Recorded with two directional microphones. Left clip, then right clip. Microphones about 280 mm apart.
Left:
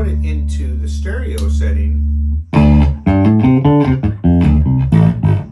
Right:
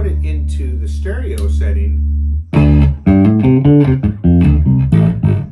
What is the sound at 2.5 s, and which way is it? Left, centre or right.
Music, centre.